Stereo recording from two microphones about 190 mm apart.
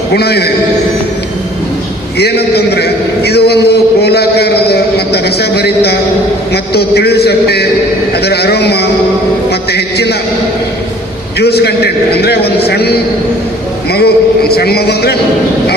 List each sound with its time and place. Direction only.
0.1 s a man's voice: 55° left (ahead or behind)
2.1 s a man's voice: 60° left (ahead or behind)
9.5 s a sound: 60° left (ahead or behind)
11.3 s a man's voice: 60° left (ahead or behind)